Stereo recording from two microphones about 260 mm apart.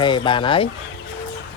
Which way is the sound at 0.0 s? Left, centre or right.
Centre.